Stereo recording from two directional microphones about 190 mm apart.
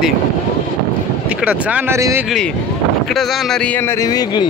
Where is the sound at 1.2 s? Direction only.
5° right (ahead or behind).